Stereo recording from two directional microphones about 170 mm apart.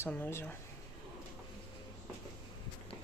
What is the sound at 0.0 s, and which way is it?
Speech, 15° left (ahead or behind).